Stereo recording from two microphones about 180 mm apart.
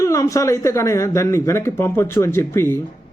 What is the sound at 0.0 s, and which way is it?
Speech, 15° left (ahead or behind).